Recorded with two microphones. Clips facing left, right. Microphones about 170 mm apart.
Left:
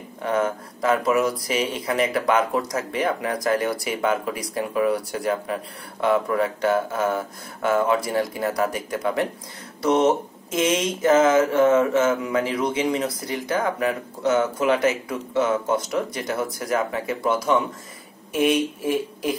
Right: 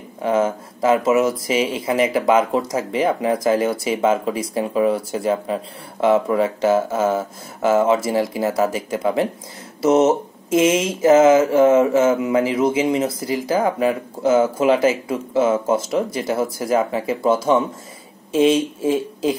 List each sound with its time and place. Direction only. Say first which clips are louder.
0.2 s speech: right 4 dB; 25° right (ahead or behind)